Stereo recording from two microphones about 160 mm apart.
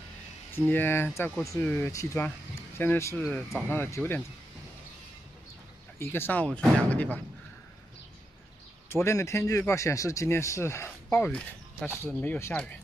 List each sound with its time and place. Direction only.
0.7 s a man's voice: 10° left (ahead or behind)
3.3 s speech: centre (ahead or behind)
3.7 s a man's voice: 15° left (ahead or behind)
5.9 s a man's voice: 15° left (ahead or behind)
8.8 s a man's voice: 15° left (ahead or behind)